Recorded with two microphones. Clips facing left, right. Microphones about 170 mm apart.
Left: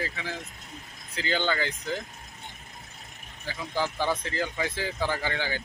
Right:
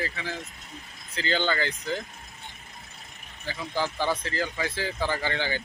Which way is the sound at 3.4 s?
10° left (ahead or behind).